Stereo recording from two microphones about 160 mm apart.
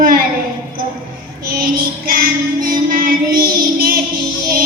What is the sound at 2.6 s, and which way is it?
Music, 65° right (ahead or behind).